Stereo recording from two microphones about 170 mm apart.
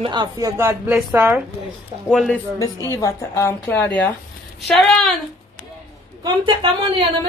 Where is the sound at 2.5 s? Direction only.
20° left (ahead or behind); by 5.1 s centre (ahead or behind).